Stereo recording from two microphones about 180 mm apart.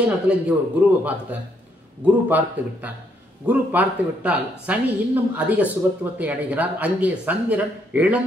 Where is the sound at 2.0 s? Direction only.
10° right (ahead or behind).